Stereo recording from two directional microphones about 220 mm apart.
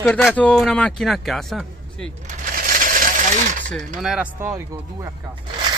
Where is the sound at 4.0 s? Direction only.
5° right (ahead or behind).